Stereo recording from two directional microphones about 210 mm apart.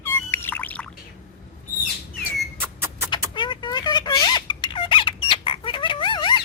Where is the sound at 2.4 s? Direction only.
10° right (ahead or behind).